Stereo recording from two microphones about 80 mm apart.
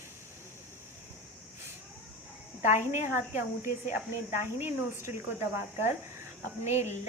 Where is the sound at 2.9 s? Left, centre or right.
Right.